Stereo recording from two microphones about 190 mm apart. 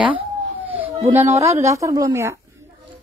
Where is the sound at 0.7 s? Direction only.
10° right (ahead or behind).